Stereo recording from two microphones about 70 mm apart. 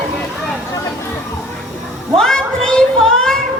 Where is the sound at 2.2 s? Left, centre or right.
Centre.